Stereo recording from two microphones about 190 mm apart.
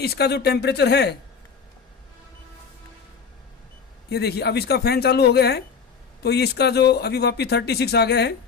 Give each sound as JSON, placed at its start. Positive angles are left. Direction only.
{"t": 0.0, "sound": "speech", "side_deg": 60}
{"t": 4.1, "sound": "speech", "side_deg": 60}